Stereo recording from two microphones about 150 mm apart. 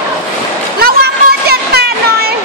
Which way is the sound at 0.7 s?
90° right.